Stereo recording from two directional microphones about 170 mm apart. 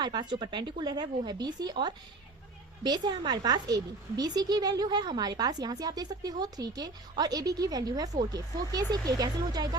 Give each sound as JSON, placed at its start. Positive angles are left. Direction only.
{"t": 0.0, "sound": "speech", "side_deg": -25}